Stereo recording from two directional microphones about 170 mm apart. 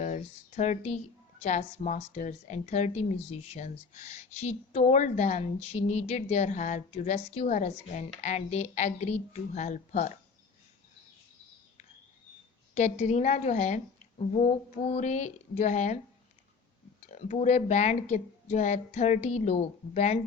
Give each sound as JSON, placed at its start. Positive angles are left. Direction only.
{"t": 0.0, "sound": "a woman's voice", "side_deg": 45}
{"t": 12.7, "sound": "a woman's voice", "side_deg": 45}
{"t": 17.1, "sound": "a woman's voice", "side_deg": 45}